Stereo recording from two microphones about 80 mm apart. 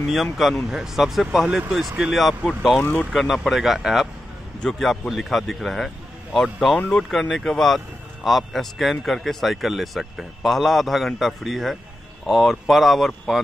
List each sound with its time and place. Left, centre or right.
0.1 s speech: centre
2.8 s speech: left
3.1 s speech: centre